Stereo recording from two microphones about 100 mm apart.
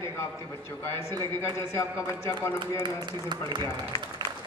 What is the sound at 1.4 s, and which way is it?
A woman's voice, 25° left (ahead or behind).